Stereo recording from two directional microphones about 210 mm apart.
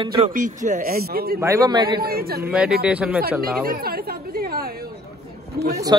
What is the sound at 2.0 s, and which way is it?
Speech, 45° right (ahead or behind).